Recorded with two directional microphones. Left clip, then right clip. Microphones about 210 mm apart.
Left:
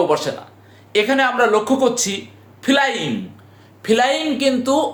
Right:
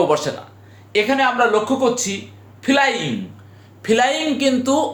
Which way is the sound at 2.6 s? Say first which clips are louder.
Even; 15° left (ahead or behind).